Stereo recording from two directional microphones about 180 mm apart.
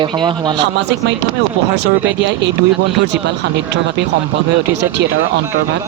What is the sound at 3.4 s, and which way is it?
Speech, 75° right (ahead or behind).